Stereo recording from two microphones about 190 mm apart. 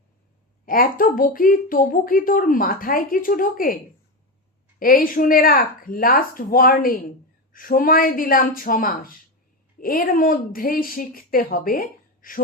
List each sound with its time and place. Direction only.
0.6 s speech: 45° left (ahead or behind)
4.8 s speech: 50° left (ahead or behind)